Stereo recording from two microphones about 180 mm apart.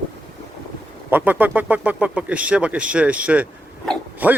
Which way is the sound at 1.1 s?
10° right (ahead or behind).